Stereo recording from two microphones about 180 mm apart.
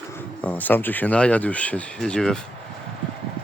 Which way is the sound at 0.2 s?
10° left (ahead or behind).